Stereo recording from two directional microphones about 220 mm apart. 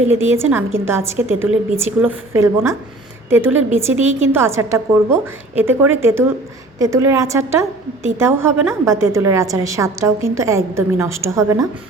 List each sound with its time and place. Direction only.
0.1 s a woman's voice: 10° right (ahead or behind)